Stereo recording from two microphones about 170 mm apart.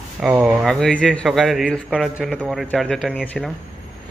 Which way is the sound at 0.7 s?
Centre (ahead or behind).